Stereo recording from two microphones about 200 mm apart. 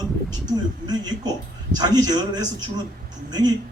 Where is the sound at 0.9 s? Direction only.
20° right (ahead or behind).